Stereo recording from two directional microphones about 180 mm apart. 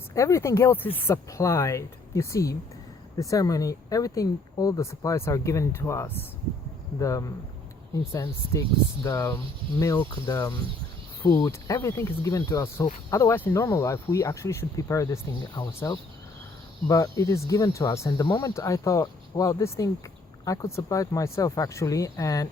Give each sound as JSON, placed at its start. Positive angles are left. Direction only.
{"t": 0.1, "sound": "speech", "side_deg": 15}